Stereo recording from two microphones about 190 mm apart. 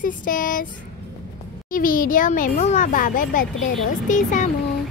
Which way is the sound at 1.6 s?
45° left (ahead or behind).